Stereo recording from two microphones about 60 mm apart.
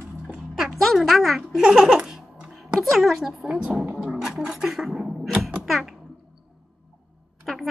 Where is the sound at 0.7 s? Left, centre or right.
Centre.